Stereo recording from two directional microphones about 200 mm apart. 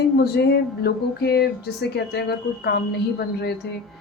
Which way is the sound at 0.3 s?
55° left (ahead or behind).